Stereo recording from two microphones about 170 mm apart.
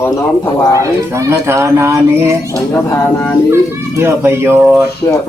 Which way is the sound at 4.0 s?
15° right (ahead or behind).